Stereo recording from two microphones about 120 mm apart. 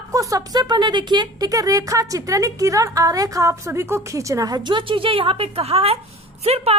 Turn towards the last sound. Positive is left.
turn(degrees=-55)  # may be behind; listen again after turning